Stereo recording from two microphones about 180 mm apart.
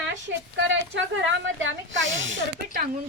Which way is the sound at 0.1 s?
90° right.